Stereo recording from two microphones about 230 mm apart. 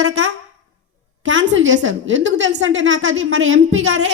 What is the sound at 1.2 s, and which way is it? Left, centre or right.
A woman's voice, right.